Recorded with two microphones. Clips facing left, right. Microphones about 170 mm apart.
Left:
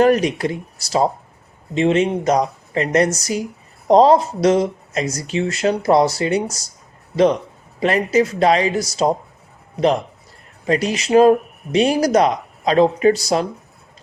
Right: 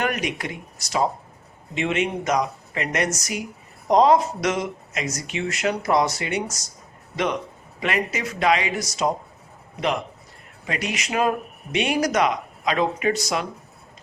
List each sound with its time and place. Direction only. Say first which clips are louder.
0.0 s speech: left 11 dB; 35° left (ahead or behind)
7.8 s speech: left 9 dB; 35° left (ahead or behind)
10.7 s speech: left 11 dB; 35° left (ahead or behind)